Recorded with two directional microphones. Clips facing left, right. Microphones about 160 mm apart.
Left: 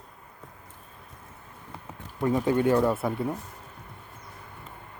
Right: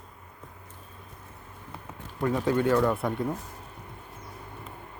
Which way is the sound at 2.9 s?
5° left (ahead or behind).